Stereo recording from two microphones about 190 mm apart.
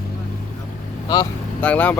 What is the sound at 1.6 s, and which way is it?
Speech, 10° left (ahead or behind).